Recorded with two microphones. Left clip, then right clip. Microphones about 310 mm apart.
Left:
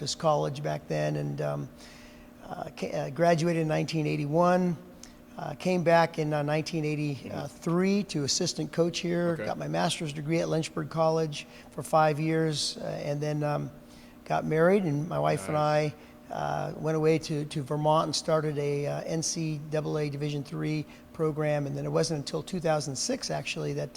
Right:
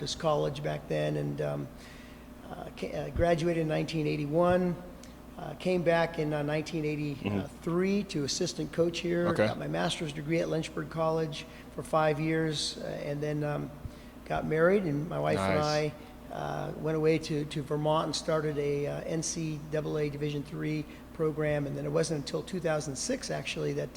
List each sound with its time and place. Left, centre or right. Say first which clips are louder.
0.0 s speech: left 2 dB; left
2.5 s speech: left 4 dB; left